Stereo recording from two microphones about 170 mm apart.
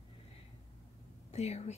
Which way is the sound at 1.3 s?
40° left (ahead or behind).